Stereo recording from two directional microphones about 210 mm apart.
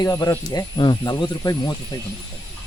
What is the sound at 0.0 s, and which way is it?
Speech, 15° left (ahead or behind).